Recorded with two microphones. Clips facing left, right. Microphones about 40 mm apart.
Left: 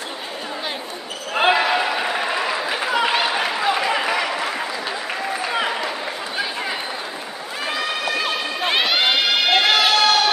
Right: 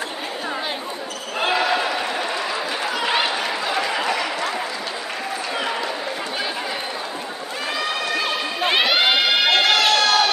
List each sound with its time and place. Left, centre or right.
1.3 s basketball bounce: left
2.7 s a sound: left
7.6 s crowd: centre